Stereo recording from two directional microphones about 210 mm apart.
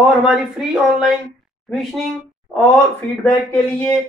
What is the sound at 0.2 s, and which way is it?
Speech, 5° right (ahead or behind).